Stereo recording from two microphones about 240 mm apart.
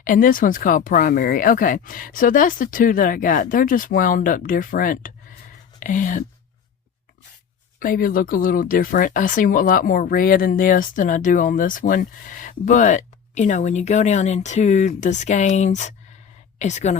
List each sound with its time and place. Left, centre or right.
0.0 s speech: left
7.8 s a woman's voice: left